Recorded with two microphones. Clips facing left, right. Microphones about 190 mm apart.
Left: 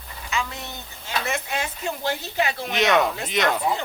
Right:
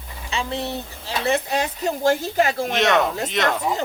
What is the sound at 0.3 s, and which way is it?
Speech, 30° right (ahead or behind).